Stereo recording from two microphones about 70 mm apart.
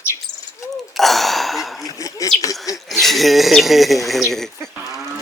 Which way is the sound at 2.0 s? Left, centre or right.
Left.